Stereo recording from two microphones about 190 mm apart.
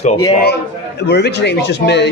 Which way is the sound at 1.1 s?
60° left (ahead or behind).